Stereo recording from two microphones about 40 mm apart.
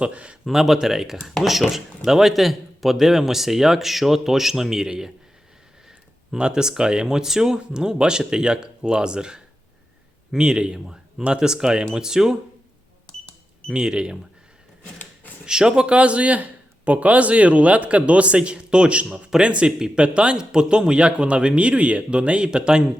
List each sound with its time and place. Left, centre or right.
0.0 s a man's voice: right
0.5 s speech: centre
6.3 s a man's voice: right
13.1 s cash register: left
13.7 s speech: centre
15.4 s a man's voice: centre
16.0 s a man's voice: right